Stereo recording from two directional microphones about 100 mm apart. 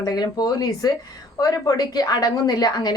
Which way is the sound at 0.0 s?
45° left (ahead or behind).